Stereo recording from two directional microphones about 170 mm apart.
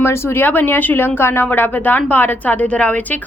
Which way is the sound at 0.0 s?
15° left (ahead or behind).